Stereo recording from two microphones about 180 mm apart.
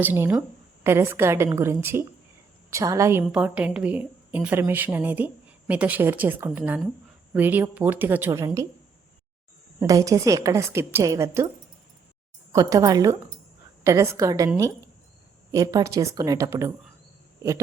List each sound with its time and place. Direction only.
0.0 s a woman's voice: 10° right (ahead or behind)
9.8 s a woman's voice: 20° right (ahead or behind)
12.5 s a woman's voice: 20° right (ahead or behind)